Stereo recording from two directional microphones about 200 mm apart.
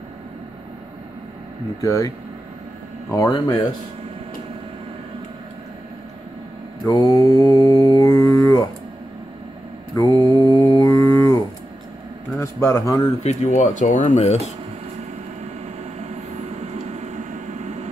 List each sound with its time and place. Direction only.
1.8 s speech: 15° left (ahead or behind)
6.9 s mantra: 20° left (ahead or behind)
9.9 s mantra: 20° left (ahead or behind)
12.3 s a sound: 15° left (ahead or behind)
13.2 s speech: 35° left (ahead or behind)
16.5 s vehicle: 35° right (ahead or behind)